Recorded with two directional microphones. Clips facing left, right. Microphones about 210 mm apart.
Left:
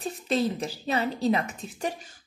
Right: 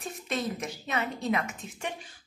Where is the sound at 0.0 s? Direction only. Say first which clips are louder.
Left 6 dB; 30° left (ahead or behind).